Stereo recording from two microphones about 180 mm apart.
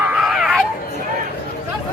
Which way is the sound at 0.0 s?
5° right (ahead or behind).